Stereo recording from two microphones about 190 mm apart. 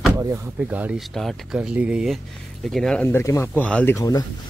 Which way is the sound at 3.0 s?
15° left (ahead or behind).